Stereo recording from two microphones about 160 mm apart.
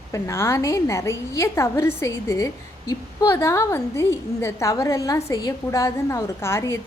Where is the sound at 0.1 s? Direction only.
15° left (ahead or behind).